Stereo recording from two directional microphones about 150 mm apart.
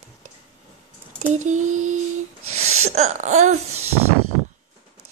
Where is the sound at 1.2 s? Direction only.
50° right (ahead or behind).